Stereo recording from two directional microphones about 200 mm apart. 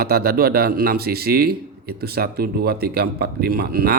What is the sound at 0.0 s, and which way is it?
Speech, 50° right (ahead or behind).